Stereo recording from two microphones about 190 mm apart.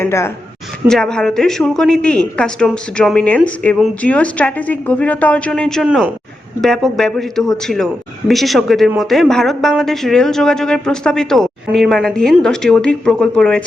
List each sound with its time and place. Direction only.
0.0 s a woman's voice: 15° left (ahead or behind)
0.9 s a woman's voice: 5° left (ahead or behind)